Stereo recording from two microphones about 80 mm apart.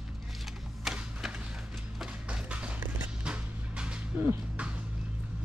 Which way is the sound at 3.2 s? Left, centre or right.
Centre.